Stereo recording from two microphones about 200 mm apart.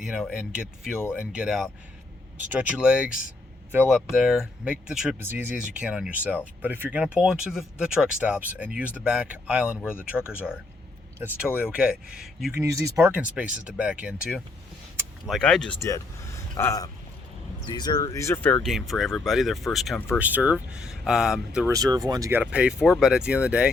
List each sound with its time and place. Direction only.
0.0 s speech: centre (ahead or behind)
12.5 s speech: 15° right (ahead or behind); by 15.7 s 5° left (ahead or behind)
16.6 s speech: 15° left (ahead or behind); by 21.7 s centre (ahead or behind)
21.7 s speech: 20° right (ahead or behind)